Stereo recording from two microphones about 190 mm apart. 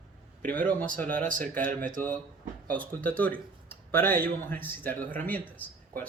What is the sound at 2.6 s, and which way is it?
Speech, 10° left (ahead or behind).